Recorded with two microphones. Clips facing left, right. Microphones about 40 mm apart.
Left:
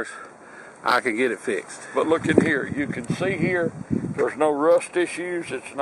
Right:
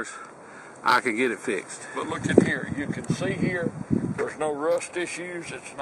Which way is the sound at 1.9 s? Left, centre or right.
Centre.